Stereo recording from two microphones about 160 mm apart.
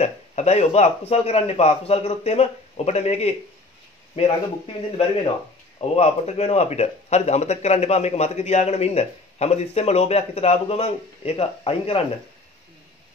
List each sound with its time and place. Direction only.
0.0 s speech: 45° left (ahead or behind)